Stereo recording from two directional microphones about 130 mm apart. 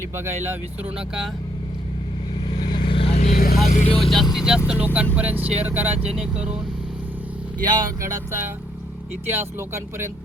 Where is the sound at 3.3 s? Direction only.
70° left (ahead or behind).